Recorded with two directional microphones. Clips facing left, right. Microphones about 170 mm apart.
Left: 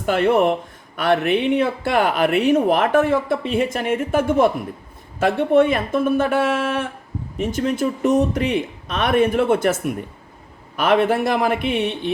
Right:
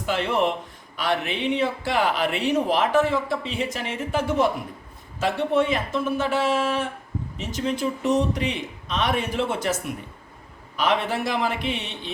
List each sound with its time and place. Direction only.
0.0 s speech: 50° left (ahead or behind)